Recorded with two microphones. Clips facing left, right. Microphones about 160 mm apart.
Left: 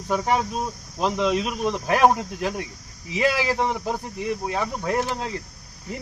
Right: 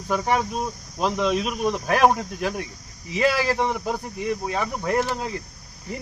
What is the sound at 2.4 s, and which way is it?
Speech, 15° left (ahead or behind).